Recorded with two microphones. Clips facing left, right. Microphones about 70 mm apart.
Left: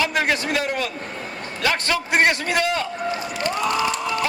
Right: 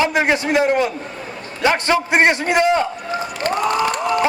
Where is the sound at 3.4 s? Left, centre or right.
Right.